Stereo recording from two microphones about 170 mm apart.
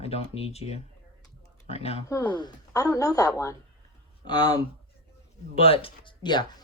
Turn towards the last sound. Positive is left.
turn(degrees=25)  # may be behind; listen again after turning